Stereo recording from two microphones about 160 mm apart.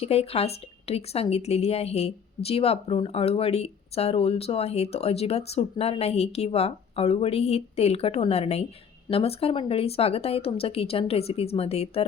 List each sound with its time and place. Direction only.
0.0 s a woman's voice: 40° left (ahead or behind)